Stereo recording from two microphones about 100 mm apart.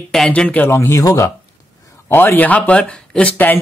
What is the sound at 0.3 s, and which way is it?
Speech, 15° left (ahead or behind).